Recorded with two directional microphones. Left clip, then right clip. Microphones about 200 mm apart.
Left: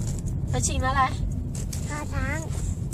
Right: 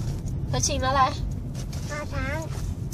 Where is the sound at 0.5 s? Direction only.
35° right (ahead or behind).